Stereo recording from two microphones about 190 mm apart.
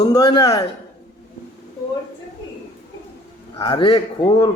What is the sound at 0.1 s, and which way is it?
Speech, 20° left (ahead or behind).